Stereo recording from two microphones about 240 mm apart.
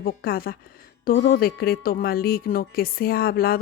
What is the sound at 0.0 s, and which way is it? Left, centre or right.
Speech, left.